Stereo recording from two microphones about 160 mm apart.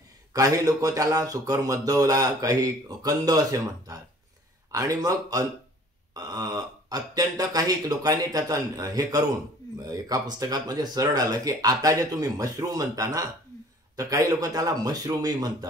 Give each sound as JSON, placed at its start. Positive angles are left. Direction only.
{"t": 0.3, "sound": "speech", "side_deg": -20}